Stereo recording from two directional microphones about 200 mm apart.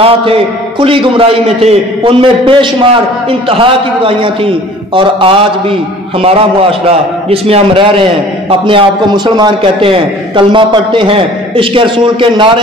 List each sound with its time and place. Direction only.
0.0 s a man's voice: 25° right (ahead or behind)
6.9 s a man's voice: 30° right (ahead or behind)